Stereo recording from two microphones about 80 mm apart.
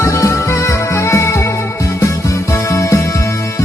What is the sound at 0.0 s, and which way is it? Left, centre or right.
Music, left.